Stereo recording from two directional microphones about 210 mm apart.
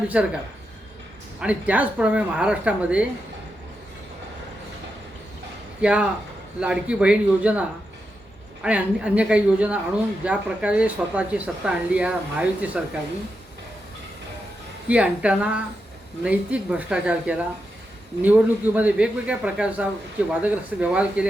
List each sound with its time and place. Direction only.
0.1 s speech: 5° right (ahead or behind)
1.4 s speech: 5° right (ahead or behind)
5.8 s speech: 5° right (ahead or behind)
8.6 s speech: 5° right (ahead or behind)
14.8 s speech: 5° right (ahead or behind)